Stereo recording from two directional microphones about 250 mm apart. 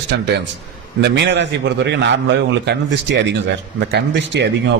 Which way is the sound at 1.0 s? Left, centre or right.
Right.